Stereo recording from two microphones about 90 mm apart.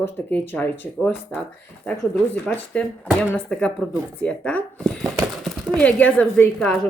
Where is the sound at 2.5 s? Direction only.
10° left (ahead or behind).